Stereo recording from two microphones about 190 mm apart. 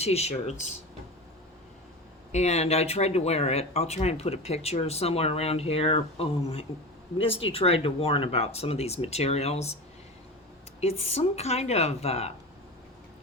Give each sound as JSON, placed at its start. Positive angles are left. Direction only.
{"t": 0.0, "sound": "speech", "side_deg": 35}
{"t": 2.3, "sound": "speech", "side_deg": 35}
{"t": 10.8, "sound": "speech", "side_deg": 35}